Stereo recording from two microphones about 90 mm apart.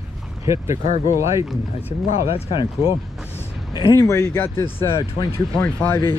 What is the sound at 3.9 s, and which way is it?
Speech, 30° left (ahead or behind).